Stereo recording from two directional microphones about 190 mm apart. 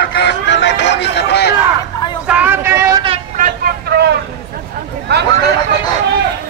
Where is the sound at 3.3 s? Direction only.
45° right (ahead or behind).